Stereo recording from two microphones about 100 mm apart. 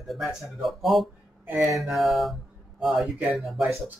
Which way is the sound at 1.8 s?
Centre (ahead or behind).